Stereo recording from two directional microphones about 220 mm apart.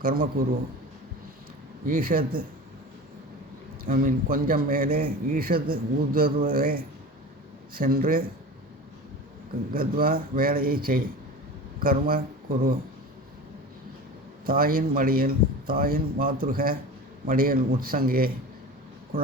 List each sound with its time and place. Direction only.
0.0 s a man's voice: 40° right (ahead or behind)
1.9 s a man's voice: 40° right (ahead or behind)
3.8 s a man's voice: 40° right (ahead or behind)
9.7 s a man's voice: 40° right (ahead or behind)
14.4 s a man's voice: 40° right (ahead or behind)